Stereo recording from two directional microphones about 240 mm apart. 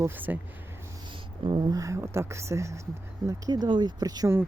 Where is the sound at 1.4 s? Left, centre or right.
Centre.